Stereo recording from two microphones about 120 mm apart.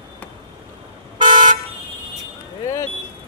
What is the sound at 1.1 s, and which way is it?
Toot, 45° right (ahead or behind).